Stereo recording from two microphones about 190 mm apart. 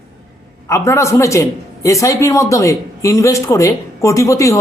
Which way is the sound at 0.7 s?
15° left (ahead or behind).